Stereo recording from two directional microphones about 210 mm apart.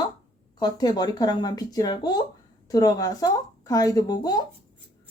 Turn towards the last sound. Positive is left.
turn(degrees=20)  # may be behind; listen again after turning